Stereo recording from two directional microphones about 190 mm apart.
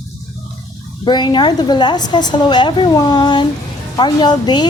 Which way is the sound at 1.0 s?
25° left (ahead or behind).